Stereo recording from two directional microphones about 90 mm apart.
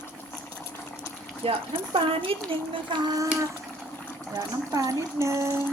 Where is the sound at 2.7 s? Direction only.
65° right (ahead or behind).